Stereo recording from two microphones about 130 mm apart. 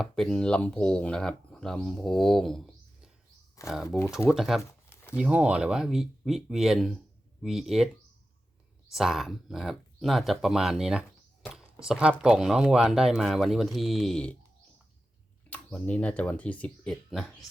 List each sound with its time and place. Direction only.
0.0 s speech: 5° left (ahead or behind)
3.8 s speech: 20° left (ahead or behind)
4.3 s speech: centre (ahead or behind)
8.9 s speech: centre (ahead or behind)
15.4 s speech: 10° left (ahead or behind)